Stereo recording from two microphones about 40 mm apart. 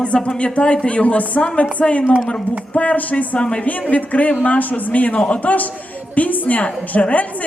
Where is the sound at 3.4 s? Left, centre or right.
Left.